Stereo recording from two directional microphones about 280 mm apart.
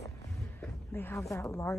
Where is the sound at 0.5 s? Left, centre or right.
Centre.